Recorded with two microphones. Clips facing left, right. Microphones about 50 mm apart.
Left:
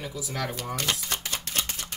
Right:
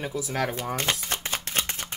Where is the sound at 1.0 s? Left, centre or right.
Right.